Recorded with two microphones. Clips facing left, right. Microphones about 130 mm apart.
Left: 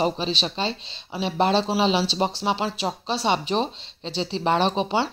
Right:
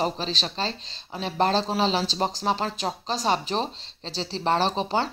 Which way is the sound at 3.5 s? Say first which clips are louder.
Left 3 dB; 35° right (ahead or behind).